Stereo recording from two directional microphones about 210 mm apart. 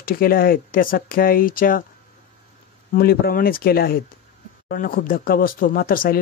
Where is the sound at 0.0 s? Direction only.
45° left (ahead or behind).